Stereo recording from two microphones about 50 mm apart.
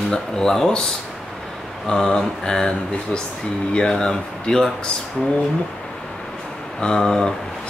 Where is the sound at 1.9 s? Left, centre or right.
Centre.